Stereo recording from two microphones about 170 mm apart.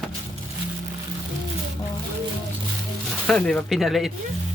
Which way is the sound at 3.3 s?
5° left (ahead or behind).